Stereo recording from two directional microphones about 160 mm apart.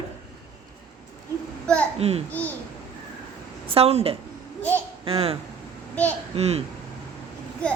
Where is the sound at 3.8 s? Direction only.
40° right (ahead or behind).